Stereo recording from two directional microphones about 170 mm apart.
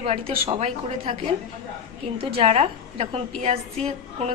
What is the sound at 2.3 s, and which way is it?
A woman's voice, 35° right (ahead or behind).